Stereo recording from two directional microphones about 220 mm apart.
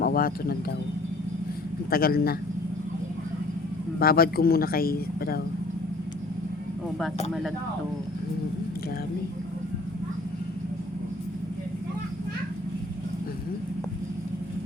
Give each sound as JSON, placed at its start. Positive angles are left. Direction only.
{"t": 0.0, "sound": "a sound", "side_deg": 40}
{"t": 1.9, "sound": "speech", "side_deg": 45}
{"t": 4.0, "sound": "speech", "side_deg": 45}